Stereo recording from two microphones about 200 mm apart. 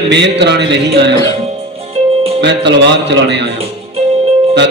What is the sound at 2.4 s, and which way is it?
A man's voice, 60° right (ahead or behind).